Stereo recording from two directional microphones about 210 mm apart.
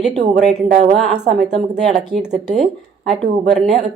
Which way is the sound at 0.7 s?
35° right (ahead or behind).